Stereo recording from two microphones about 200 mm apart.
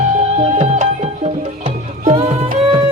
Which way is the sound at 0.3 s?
35° right (ahead or behind).